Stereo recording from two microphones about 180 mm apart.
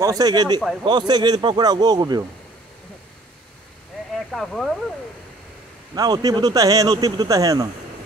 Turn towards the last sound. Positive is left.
turn(degrees=-20)  # may be behind; listen again after turning